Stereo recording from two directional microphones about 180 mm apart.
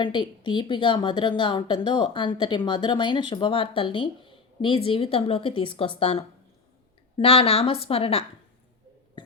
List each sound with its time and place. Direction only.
0.0 s a woman's voice: 25° left (ahead or behind)